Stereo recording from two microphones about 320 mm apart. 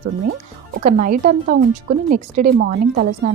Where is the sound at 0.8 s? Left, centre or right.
Right.